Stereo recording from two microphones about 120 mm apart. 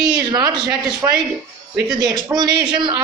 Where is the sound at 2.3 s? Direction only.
35° right (ahead or behind).